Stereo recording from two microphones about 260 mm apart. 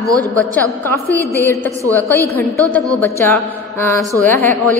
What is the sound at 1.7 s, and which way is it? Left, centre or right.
Speech, centre.